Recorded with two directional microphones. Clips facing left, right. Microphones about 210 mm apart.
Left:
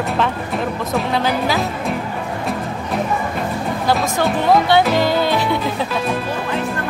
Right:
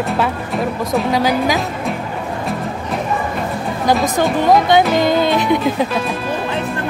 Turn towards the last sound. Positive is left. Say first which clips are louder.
# right 3 dB
turn(degrees=-20)  # may be behind; listen again after turning